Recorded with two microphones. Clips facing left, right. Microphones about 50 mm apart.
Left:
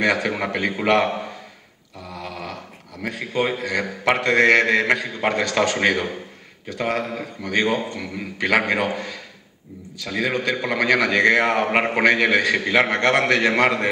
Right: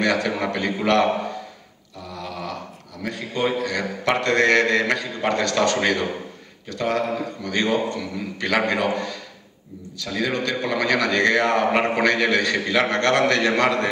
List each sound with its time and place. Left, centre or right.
0.0 s a man's voice: centre
2.1 s a sound: centre
3.0 s a man's voice: left